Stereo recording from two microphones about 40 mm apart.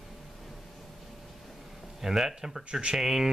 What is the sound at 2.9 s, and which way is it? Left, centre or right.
Speech, centre.